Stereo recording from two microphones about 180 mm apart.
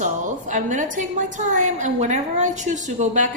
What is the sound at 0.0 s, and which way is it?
A woman's voice, 45° right (ahead or behind).